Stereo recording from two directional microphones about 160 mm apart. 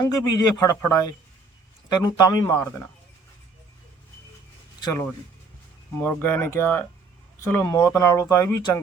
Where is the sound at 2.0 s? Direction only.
25° left (ahead or behind).